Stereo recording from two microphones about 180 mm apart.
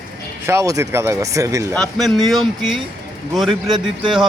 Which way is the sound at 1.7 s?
5° left (ahead or behind).